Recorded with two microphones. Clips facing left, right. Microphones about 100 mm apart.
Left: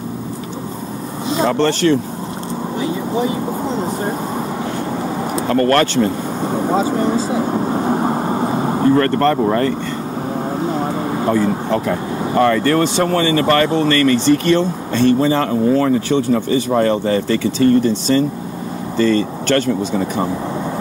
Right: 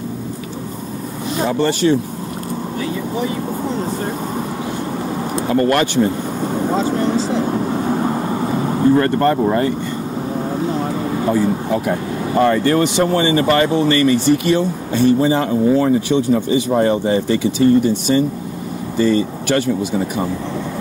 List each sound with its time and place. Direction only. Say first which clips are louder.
1.5 s speech: even; 10° right (ahead or behind)
2.8 s vehicle: left 3 dB; 20° left (ahead or behind)
5.5 s speech: left 1 dB; 15° right (ahead or behind)
6.4 s speech: left 1 dB; 20° left (ahead or behind)
7.7 s vehicle: left 1 dB; 30° left (ahead or behind)
8.9 s speech: even; 15° right (ahead or behind)
11.3 s speech: even; 10° right (ahead or behind)